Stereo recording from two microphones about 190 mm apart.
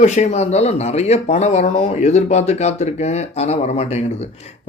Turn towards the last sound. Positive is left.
turn(degrees=35)  # may be behind; listen again after turning